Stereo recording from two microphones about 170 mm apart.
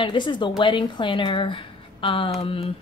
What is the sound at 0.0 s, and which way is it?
A woman's voice, 30° left (ahead or behind).